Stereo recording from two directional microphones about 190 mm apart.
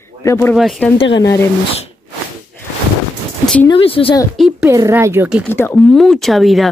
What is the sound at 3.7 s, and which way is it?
Speech, 30° left (ahead or behind).